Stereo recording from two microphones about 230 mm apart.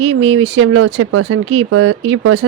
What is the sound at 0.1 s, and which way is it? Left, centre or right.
Speech, right.